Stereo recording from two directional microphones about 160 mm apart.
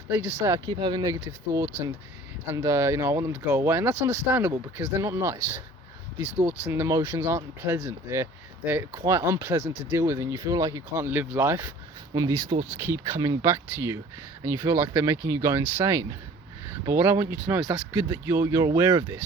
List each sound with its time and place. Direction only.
0.1 s speech: 15° right (ahead or behind)